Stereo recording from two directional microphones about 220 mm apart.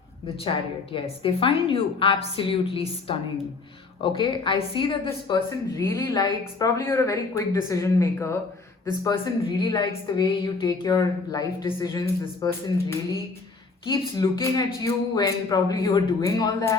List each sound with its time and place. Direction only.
0.9 s a woman's voice: 25° left (ahead or behind)